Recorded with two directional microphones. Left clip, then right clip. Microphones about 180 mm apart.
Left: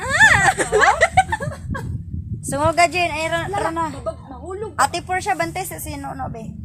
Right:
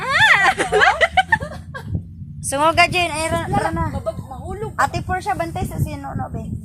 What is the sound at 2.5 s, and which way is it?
Speech, 10° right (ahead or behind).